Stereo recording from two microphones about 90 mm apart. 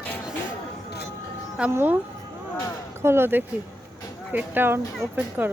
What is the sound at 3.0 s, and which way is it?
Speech, 25° right (ahead or behind).